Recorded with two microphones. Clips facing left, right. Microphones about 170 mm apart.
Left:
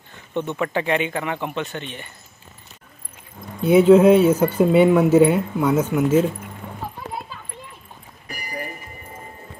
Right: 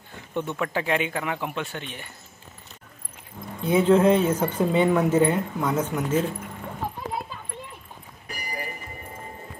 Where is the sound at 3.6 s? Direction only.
10° left (ahead or behind).